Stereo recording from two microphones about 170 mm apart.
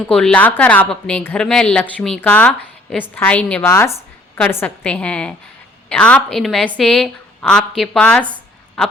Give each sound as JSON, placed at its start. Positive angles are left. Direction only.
{"t": 0.1, "sound": "a woman's voice", "side_deg": 5}